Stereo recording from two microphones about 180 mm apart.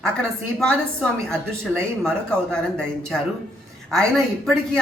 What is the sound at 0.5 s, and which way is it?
A woman's voice, 5° left (ahead or behind).